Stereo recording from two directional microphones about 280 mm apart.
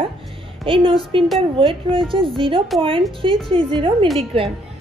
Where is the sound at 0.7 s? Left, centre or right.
Centre.